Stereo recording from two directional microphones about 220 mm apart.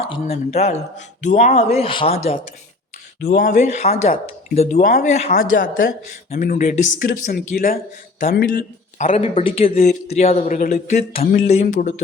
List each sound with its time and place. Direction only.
0.3 s speech: 30° left (ahead or behind)
9.6 s speech: 40° left (ahead or behind)